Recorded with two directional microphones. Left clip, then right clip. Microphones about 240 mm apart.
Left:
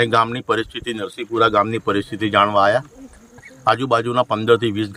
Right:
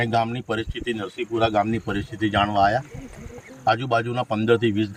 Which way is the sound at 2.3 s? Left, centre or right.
Centre.